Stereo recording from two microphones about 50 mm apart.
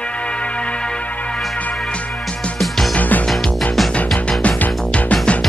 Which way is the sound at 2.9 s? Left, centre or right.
Left.